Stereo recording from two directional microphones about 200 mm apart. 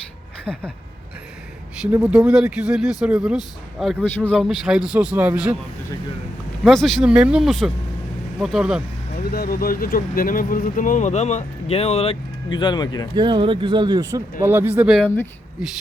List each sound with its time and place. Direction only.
0.5 s speech: 5° left (ahead or behind)
1.8 s speech: 5° right (ahead or behind)
6.7 s speech: centre (ahead or behind)
9.3 s speech: 50° left (ahead or behind); by 13.1 s 20° left (ahead or behind)
13.1 s speech: 25° right (ahead or behind)
14.8 s speech: centre (ahead or behind)